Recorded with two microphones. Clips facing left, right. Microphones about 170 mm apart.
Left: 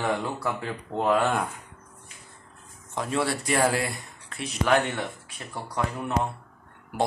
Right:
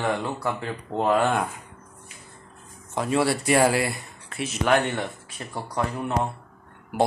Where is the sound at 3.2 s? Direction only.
10° right (ahead or behind).